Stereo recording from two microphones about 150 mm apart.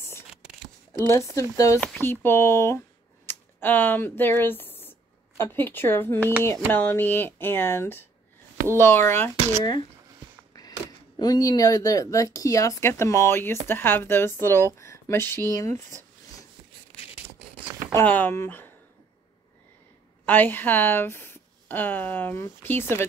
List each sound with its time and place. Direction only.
1.0 s a woman's voice: 20° left (ahead or behind)
3.3 s a sound: 15° left (ahead or behind)
3.6 s a woman's voice: 15° left (ahead or behind)
11.1 s a woman's voice: 25° left (ahead or behind)
17.9 s a woman's voice: 10° left (ahead or behind)
20.2 s a woman's voice: 10° left (ahead or behind)